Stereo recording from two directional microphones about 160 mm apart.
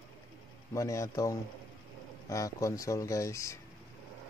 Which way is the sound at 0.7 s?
20° left (ahead or behind).